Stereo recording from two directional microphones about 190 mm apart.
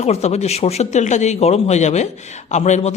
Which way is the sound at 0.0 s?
35° left (ahead or behind).